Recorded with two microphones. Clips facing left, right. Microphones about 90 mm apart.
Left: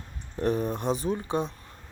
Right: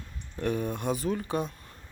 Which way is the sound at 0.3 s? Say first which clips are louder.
Left 3 dB; 25° left (ahead or behind).